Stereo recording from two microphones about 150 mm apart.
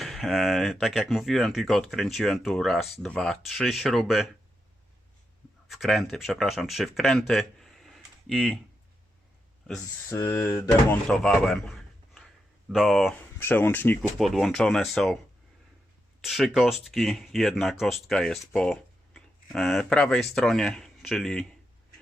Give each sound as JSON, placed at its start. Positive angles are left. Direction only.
{"t": 0.0, "sound": "speech", "side_deg": 0}
{"t": 5.7, "sound": "speech", "side_deg": 0}
{"t": 10.1, "sound": "speech", "side_deg": 20}
{"t": 11.1, "sound": "a sound", "side_deg": 5}
{"t": 12.7, "sound": "speech", "side_deg": 0}
{"t": 13.4, "sound": "speech", "side_deg": 15}
{"t": 14.2, "sound": "speech", "side_deg": 0}
{"t": 16.2, "sound": "speech", "side_deg": 0}